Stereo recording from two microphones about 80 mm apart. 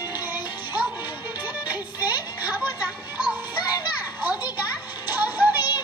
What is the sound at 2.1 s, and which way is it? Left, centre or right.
Music, right.